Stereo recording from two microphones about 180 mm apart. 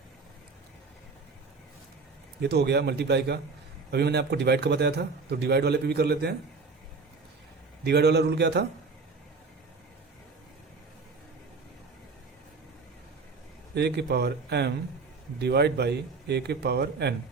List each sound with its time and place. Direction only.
2.4 s a man's voice: 65° right (ahead or behind)
7.9 s a man's voice: 65° right (ahead or behind)
13.7 s speech: 65° right (ahead or behind)